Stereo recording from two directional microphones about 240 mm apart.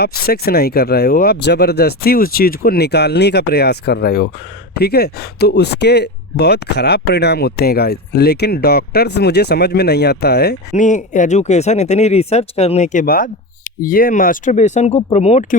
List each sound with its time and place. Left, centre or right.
0.0 s speech: left
10.7 s speech: left